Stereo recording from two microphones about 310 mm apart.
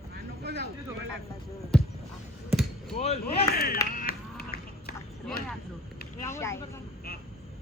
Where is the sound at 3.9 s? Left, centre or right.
Left.